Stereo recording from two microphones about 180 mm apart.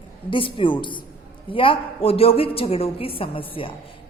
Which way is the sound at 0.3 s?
30° left (ahead or behind).